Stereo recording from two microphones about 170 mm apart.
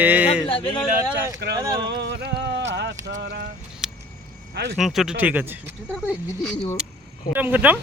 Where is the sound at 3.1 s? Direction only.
75° right (ahead or behind).